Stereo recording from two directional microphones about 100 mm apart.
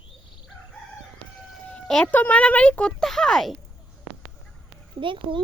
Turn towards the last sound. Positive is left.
turn(degrees=-60)  # may be behind; listen again after turning